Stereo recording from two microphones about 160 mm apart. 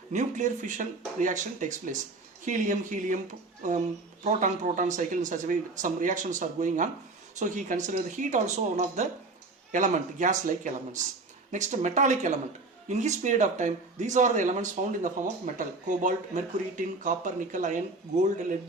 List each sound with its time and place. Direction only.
0.1 s speech: 50° right (ahead or behind)